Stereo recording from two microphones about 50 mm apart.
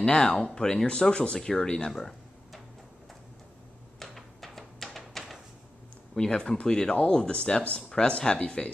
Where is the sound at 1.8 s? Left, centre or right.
Centre.